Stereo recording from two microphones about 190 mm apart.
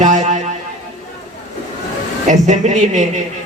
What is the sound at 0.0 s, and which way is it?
Music, 40° right (ahead or behind).